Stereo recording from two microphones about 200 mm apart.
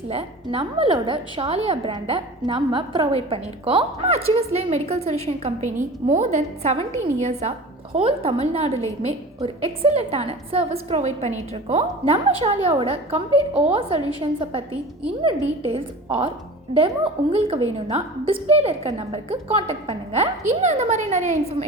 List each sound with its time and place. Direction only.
0.1 s a woman's voice: 30° right (ahead or behind)